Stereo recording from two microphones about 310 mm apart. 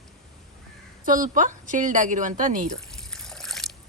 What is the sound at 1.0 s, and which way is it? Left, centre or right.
A woman's voice, right.